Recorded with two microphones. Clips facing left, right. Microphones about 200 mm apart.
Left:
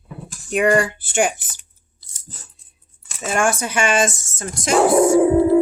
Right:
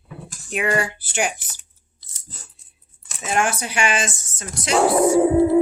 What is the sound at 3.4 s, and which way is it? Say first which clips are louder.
Speech: left 4 dB; 45° left (ahead or behind).